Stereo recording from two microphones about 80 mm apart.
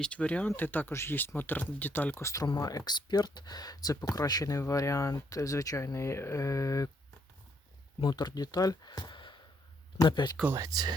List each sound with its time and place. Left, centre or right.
0.0 s speech: centre
2.6 s speech: left
8.0 s speech: left
8.9 s a sound: left
10.1 s speech: left
10.6 s speech: right